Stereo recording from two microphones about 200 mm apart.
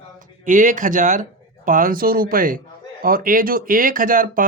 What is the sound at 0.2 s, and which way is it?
Speech, 40° right (ahead or behind).